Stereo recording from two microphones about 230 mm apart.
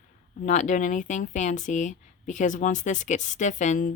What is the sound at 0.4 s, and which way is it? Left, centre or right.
Speech, left.